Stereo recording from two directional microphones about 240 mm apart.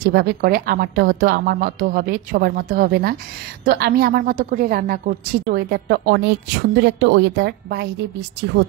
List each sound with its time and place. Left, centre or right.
0.0 s a woman's voice: right